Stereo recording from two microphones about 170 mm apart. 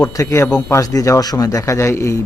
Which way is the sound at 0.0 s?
20° left (ahead or behind).